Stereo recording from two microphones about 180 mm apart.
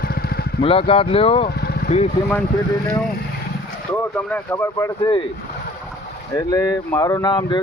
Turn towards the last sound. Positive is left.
turn(degrees=25)  # may be behind; listen again after turning